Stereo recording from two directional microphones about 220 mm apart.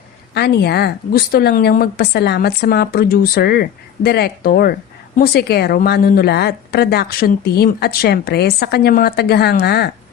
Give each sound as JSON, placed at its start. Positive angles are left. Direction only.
{"t": 0.3, "sound": "a woman's voice", "side_deg": 45}